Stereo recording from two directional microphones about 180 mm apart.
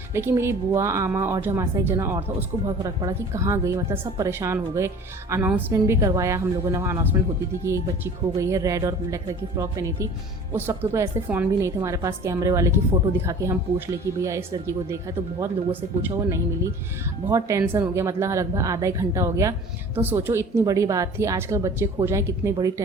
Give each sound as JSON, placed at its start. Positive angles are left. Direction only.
{"t": 0.1, "sound": "a woman's voice", "side_deg": -15}